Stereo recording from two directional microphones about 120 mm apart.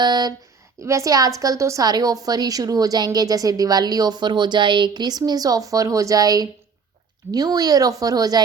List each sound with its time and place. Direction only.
0.0 s a woman's voice: 35° right (ahead or behind)